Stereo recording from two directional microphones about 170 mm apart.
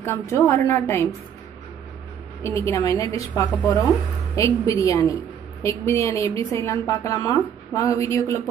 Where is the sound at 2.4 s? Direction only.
20° left (ahead or behind).